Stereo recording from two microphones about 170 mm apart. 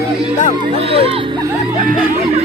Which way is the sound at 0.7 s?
35° right (ahead or behind).